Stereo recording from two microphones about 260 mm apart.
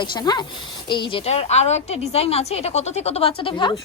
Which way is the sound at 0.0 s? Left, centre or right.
Centre.